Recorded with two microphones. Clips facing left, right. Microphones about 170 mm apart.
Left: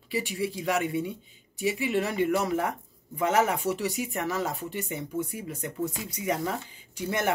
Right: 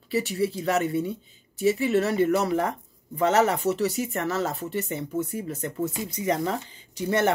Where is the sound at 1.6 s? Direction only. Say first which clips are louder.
Right 5 dB; 40° right (ahead or behind).